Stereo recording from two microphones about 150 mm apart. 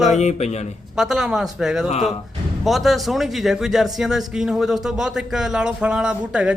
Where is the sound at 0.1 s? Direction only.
50° left (ahead or behind).